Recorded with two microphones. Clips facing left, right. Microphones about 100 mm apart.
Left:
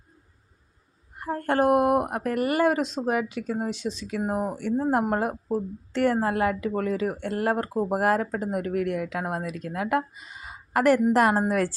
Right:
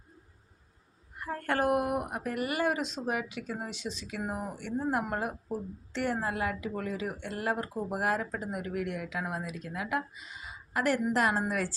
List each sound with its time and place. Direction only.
1.2 s speech: 30° left (ahead or behind)
1.9 s speech: 70° left (ahead or behind); by 2.8 s 50° left (ahead or behind)
2.8 s speech: 35° left (ahead or behind)
3.1 s speech: 45° left (ahead or behind)